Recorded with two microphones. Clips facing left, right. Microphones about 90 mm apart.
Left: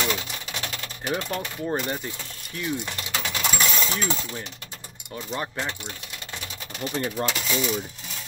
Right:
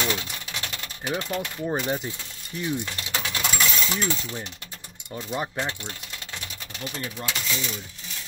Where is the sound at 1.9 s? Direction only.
15° right (ahead or behind).